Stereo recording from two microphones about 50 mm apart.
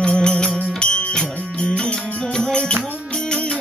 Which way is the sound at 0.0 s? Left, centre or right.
Centre.